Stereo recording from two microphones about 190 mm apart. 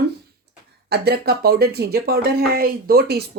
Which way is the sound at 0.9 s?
55° right (ahead or behind).